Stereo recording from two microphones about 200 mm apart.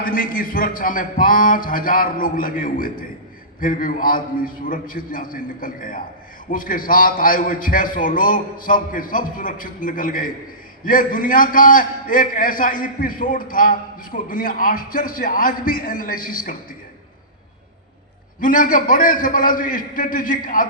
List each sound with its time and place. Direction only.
0.0 s a man's voice: 45° left (ahead or behind)
18.3 s a man's voice: 45° left (ahead or behind)